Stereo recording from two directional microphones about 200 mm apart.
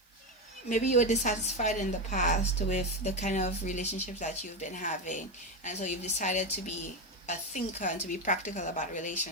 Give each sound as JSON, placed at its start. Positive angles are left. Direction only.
{"t": 0.7, "sound": "a woman's voice", "side_deg": 35}